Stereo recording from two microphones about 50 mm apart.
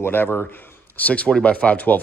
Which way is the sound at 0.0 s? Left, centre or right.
Left.